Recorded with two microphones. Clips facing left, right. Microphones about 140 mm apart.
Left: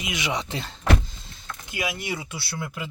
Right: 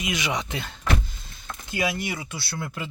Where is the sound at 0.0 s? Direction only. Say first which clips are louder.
Right 1 dB; 25° left (ahead or behind).